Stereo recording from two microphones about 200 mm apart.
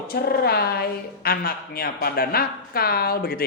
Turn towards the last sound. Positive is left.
turn(degrees=50)  # may be behind; listen again after turning